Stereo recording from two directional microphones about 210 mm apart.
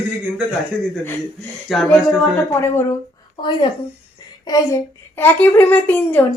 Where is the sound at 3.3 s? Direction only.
20° left (ahead or behind).